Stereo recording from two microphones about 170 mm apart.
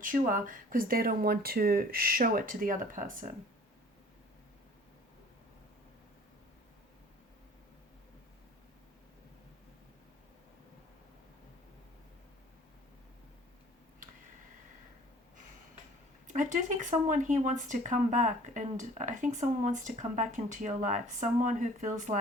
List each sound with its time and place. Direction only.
0.0 s speech: 50° right (ahead or behind)
16.2 s speech: 45° right (ahead or behind)